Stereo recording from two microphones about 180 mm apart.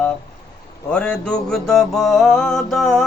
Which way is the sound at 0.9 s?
5° left (ahead or behind).